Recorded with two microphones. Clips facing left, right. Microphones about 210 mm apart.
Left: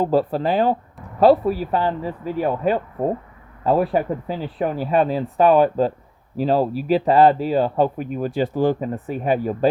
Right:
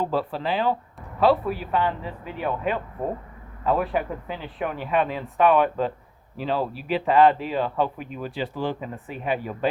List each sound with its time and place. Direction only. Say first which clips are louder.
0.0 s speech: left 7 dB; 40° left (ahead or behind)